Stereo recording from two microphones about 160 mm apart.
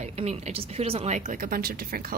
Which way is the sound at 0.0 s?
45° right (ahead or behind).